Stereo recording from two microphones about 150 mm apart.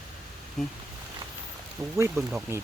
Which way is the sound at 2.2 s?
20° right (ahead or behind).